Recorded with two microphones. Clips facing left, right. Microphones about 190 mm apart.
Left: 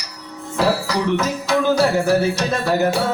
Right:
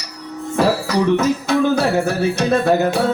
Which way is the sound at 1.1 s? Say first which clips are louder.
Right 3 dB; 60° right (ahead or behind).